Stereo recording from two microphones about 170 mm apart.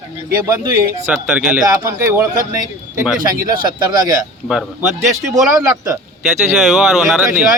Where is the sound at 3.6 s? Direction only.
25° right (ahead or behind).